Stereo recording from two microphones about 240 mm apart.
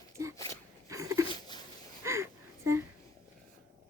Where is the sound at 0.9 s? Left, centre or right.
Centre.